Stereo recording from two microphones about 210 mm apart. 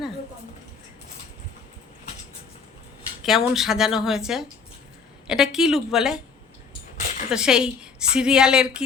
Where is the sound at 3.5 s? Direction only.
Centre (ahead or behind).